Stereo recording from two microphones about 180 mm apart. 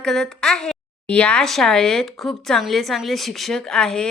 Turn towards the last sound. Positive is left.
turn(degrees=5)  # may be behind; listen again after turning